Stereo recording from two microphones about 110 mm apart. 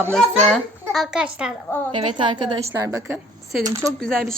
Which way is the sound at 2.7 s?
25° right (ahead or behind).